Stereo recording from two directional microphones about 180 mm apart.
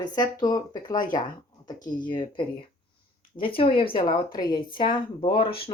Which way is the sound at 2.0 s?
25° left (ahead or behind).